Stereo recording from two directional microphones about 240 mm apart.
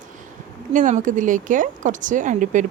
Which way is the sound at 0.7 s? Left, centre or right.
Right.